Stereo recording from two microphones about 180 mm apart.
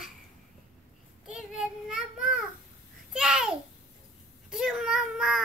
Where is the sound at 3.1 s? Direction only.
5° right (ahead or behind).